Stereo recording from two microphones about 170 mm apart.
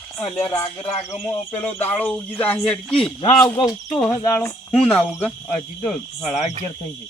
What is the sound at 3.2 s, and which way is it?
Speech, 20° left (ahead or behind).